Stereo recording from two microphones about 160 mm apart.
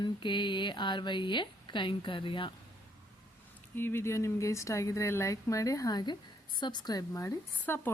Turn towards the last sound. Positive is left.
turn(degrees=10)  # may be behind; listen again after turning